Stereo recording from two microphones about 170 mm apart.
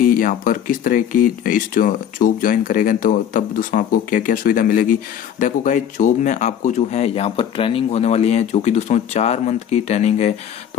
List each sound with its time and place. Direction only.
0.0 s speech: 55° left (ahead or behind)